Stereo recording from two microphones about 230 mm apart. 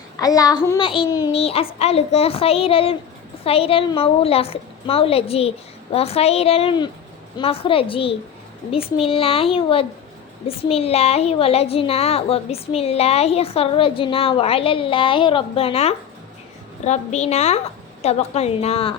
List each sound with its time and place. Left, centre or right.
0.2 s a child's voice: centre